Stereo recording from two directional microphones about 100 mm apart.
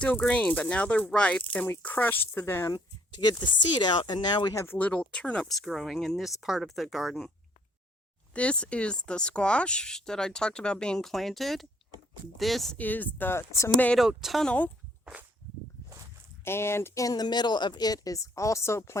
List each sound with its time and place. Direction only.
0.0 s speech: 10° left (ahead or behind)
2.7 s speech: 45° left (ahead or behind)
4.5 s speech: 25° left (ahead or behind)
4.8 s speech: 10° left (ahead or behind)
5.5 s speech: centre (ahead or behind)
8.3 s speech: 10° left (ahead or behind)
12.7 s speech: 15° left (ahead or behind)
13.7 s speech: 15° left (ahead or behind)
14.0 s speech: 5° right (ahead or behind)
14.4 s speech: 15° left (ahead or behind)
16.4 s speech: 25° left (ahead or behind)